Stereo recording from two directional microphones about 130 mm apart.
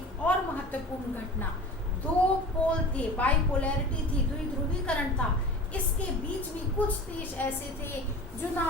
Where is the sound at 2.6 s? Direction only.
10° left (ahead or behind).